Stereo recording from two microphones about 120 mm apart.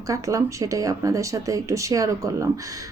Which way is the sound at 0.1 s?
25° right (ahead or behind).